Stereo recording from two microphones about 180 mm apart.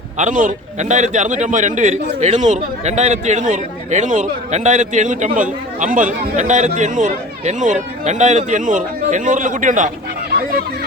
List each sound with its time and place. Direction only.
0.2 s a man's voice: 45° right (ahead or behind)